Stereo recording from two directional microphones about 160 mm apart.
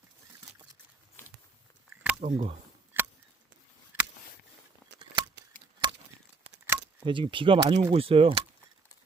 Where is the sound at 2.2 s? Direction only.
40° right (ahead or behind).